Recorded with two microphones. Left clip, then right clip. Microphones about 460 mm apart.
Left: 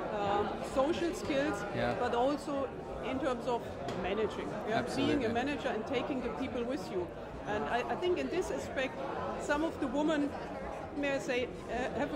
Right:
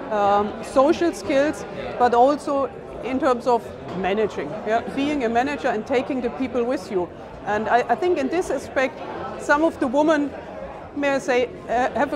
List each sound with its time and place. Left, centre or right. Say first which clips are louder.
0.2 s a woman's voice: right 14 dB; right